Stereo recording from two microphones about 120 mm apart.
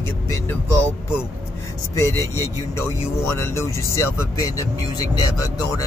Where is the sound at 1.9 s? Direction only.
25° left (ahead or behind).